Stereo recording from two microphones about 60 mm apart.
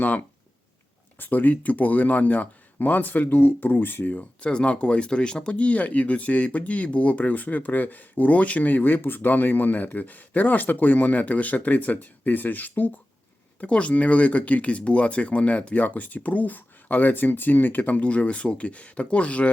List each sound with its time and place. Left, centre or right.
0.0 s speech: left